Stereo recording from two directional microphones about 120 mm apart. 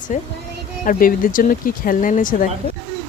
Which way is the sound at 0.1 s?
90° left.